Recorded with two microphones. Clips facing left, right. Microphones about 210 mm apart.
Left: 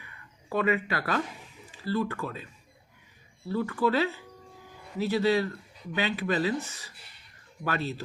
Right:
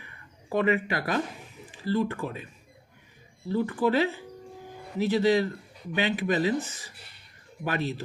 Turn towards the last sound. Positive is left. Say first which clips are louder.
# right 2 dB
turn(degrees=-15)  # may be behind; listen again after turning